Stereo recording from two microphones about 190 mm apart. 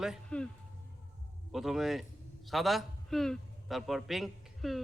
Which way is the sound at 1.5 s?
Centre (ahead or behind).